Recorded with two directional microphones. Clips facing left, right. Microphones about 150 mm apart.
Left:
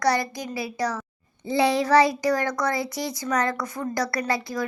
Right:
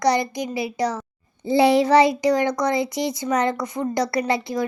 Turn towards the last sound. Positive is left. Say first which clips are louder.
# right 4 dB
turn(degrees=-25)  # may be behind; listen again after turning